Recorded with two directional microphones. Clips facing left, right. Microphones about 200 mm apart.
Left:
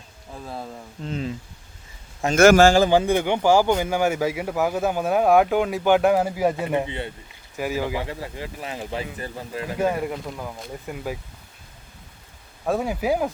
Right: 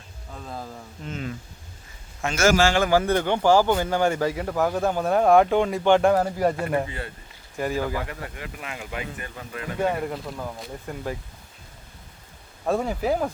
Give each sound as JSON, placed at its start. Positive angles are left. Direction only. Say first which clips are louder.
{"t": 0.6, "sound": "speech", "louder": "left 2 dB", "side_deg": 30}
{"t": 2.2, "sound": "a man's voice", "louder": "left 6 dB", "side_deg": 55}
{"t": 2.9, "sound": "speech", "louder": "left 2 dB", "side_deg": 15}
{"t": 6.6, "sound": "speech", "louder": "left 1 dB", "side_deg": 15}
{"t": 7.5, "sound": "speech", "louder": "left 1 dB", "side_deg": 5}
{"t": 8.0, "sound": "speech", "louder": "left 3 dB", "side_deg": 25}
{"t": 9.8, "sound": "speech", "louder": "left 1 dB", "side_deg": 5}
{"t": 12.6, "sound": "speech", "louder": "left 1 dB", "side_deg": 5}